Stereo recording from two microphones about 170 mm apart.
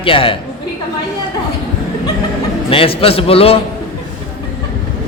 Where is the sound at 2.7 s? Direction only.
35° left (ahead or behind).